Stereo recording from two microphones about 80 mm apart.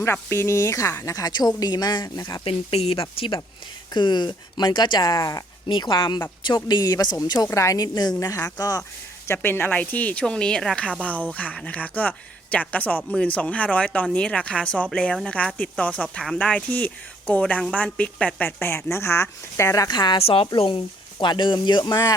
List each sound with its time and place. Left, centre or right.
0.0 s a woman's voice: left
3.9 s speech: left
5.6 s a woman's voice: left
9.2 s speech: left
19.9 s speech: left